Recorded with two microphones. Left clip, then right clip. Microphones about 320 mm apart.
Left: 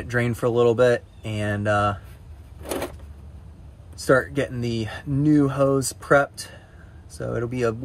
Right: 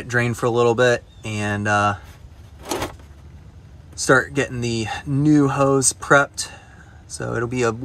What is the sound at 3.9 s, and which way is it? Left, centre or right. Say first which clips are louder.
Speech: right 3 dB; centre.